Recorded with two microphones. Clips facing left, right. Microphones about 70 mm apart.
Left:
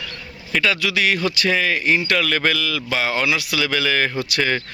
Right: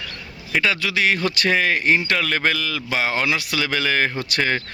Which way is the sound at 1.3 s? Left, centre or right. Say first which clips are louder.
Even; right.